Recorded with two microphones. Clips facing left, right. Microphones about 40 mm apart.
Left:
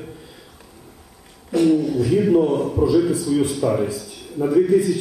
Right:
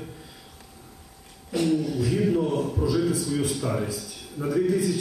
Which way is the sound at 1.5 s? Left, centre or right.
Centre.